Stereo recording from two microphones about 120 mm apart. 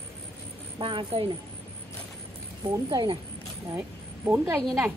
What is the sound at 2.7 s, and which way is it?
Speech, 40° right (ahead or behind).